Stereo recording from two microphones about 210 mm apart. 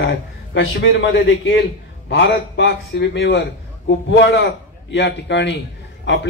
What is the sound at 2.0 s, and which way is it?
A man's voice, 55° left (ahead or behind).